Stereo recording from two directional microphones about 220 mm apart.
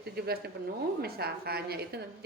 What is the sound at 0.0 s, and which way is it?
A woman's voice, 45° right (ahead or behind).